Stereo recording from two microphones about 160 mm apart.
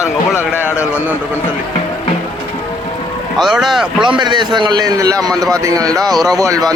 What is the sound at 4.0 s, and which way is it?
A man's voice, 30° right (ahead or behind).